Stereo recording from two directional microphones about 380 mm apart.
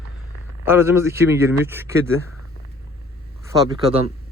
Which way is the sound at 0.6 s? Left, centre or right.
Centre.